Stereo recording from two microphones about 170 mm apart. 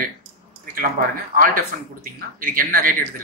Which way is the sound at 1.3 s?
55° right (ahead or behind).